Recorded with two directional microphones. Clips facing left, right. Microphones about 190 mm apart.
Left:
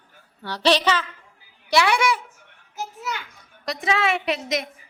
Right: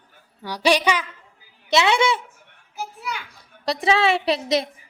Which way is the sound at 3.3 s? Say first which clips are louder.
Right 5 dB; 35° right (ahead or behind).